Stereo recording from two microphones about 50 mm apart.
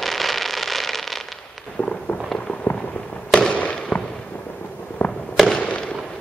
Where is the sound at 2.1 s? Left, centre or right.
Centre.